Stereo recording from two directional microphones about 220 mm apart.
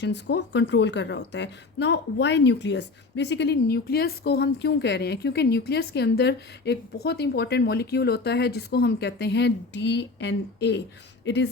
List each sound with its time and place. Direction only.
0.0 s a woman's voice: 50° left (ahead or behind)